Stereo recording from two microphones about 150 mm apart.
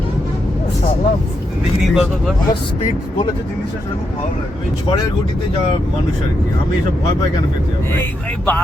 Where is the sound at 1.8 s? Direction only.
Centre (ahead or behind).